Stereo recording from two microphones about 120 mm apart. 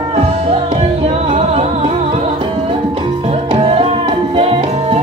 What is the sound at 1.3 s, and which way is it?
Music, 60° right (ahead or behind).